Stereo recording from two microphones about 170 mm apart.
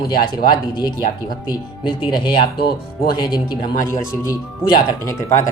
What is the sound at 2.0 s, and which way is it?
Speech, 25° left (ahead or behind).